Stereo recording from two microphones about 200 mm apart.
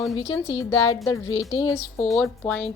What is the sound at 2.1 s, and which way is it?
Speech, centre (ahead or behind).